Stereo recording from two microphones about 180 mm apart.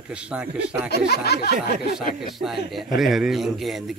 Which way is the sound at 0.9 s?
65° left (ahead or behind).